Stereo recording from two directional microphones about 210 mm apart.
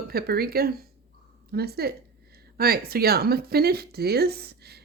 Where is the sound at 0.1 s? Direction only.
45° right (ahead or behind).